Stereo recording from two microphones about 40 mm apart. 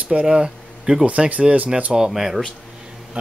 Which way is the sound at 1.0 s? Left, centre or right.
Right.